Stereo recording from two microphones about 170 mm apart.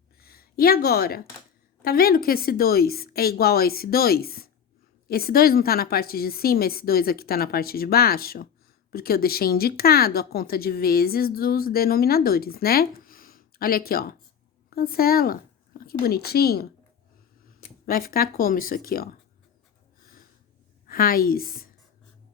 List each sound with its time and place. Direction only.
0.2 s a woman's voice: 65° left (ahead or behind)
17.8 s speech: 60° left (ahead or behind)
20.0 s a sound: 55° left (ahead or behind)
20.8 s a woman's voice: 60° left (ahead or behind)